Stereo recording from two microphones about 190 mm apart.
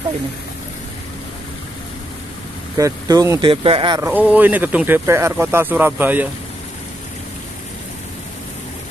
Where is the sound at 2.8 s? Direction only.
20° right (ahead or behind).